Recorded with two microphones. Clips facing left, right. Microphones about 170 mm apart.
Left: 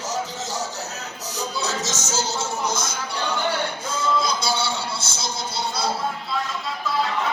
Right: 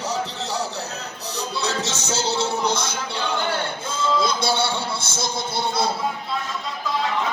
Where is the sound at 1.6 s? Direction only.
60° right (ahead or behind).